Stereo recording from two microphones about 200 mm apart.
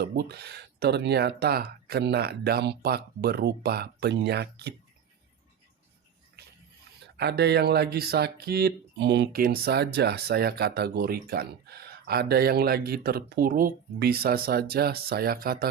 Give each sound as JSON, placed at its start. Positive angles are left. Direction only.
{"t": 0.0, "sound": "speech", "side_deg": -55}
{"t": 7.2, "sound": "speech", "side_deg": -55}